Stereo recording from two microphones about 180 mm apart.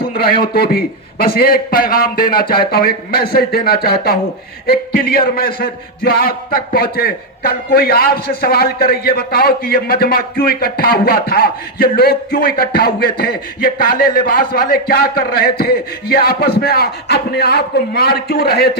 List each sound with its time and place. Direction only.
0.0 s a man's voice: 55° left (ahead or behind)